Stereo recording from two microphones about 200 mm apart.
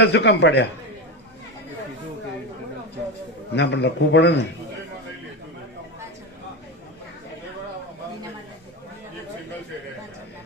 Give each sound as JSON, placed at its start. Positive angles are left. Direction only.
{"t": 0.0, "sound": "a man's voice", "side_deg": 60}
{"t": 3.5, "sound": "a man's voice", "side_deg": 60}